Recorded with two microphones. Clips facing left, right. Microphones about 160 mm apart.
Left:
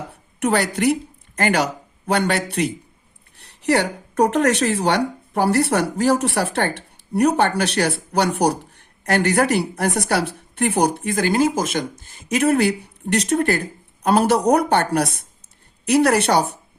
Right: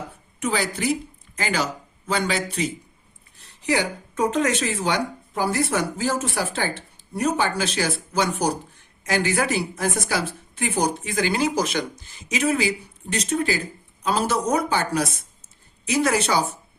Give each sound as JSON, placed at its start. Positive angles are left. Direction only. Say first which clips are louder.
{"t": 0.3, "sound": "speech", "louder": "left 5 dB", "side_deg": 65}